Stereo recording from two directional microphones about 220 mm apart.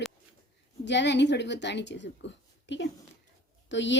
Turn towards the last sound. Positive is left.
turn(degrees=55)  # may be behind; listen again after turning